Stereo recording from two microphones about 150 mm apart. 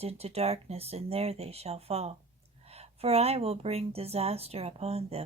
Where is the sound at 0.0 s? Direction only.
40° right (ahead or behind).